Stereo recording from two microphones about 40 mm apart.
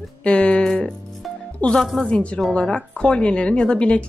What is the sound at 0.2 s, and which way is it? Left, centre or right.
Speech, left.